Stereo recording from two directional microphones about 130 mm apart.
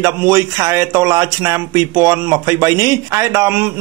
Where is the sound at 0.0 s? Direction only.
20° right (ahead or behind).